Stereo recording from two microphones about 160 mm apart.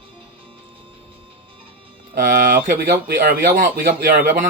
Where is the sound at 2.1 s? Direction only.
65° right (ahead or behind).